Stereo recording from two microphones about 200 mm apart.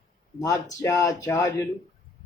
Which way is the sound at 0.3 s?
15° left (ahead or behind).